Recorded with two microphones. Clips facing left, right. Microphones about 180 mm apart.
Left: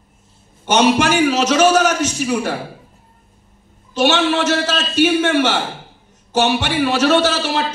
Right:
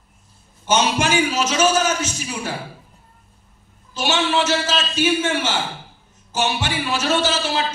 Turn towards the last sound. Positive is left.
turn(degrees=70)  # may be behind; listen again after turning